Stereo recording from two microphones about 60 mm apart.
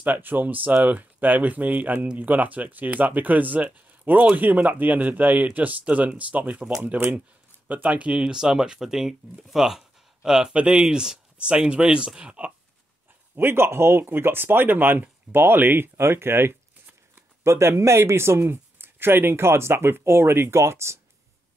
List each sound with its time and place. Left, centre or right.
0.0 s speech: right
8.2 s speech: centre
13.4 s speech: right